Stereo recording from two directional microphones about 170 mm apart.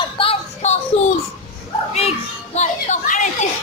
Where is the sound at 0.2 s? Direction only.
40° left (ahead or behind).